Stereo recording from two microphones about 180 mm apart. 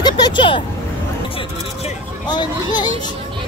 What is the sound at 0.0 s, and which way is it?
Vehicle, 25° left (ahead or behind).